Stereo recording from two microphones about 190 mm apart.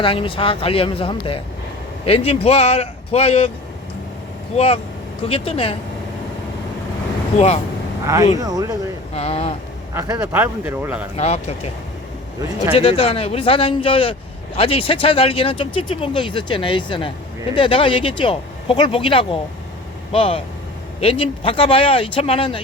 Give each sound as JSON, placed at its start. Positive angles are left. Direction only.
{"t": 0.0, "sound": "speech", "side_deg": 30}
{"t": 4.5, "sound": "speech", "side_deg": 30}
{"t": 7.3, "sound": "speech", "side_deg": 35}
{"t": 8.0, "sound": "speech", "side_deg": -15}
{"t": 9.1, "sound": "speech", "side_deg": 30}
{"t": 9.9, "sound": "speech", "side_deg": -15}
{"t": 11.2, "sound": "speech", "side_deg": 35}
{"t": 12.7, "sound": "speech", "side_deg": 30}